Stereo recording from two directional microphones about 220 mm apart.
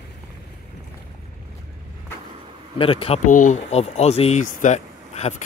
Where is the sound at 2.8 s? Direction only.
25° left (ahead or behind).